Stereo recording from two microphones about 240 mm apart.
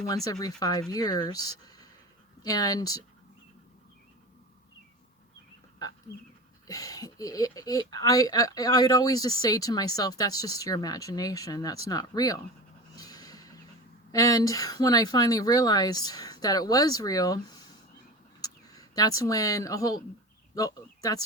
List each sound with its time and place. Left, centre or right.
0.3 s speech: centre
6.7 s speech: centre
13.0 s a sound: centre
14.1 s speech: centre